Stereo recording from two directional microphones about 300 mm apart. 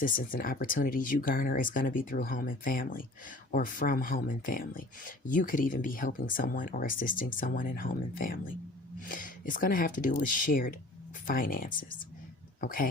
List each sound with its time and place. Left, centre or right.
0.0 s speech: left